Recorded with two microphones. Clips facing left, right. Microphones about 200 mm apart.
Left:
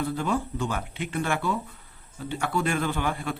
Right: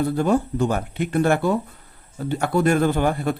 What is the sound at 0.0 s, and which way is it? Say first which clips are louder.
A man's voice: right 7 dB; 40° right (ahead or behind).